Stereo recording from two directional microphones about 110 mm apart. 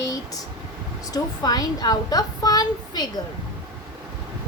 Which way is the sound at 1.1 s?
35° left (ahead or behind).